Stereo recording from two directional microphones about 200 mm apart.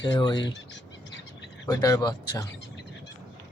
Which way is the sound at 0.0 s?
25° left (ahead or behind).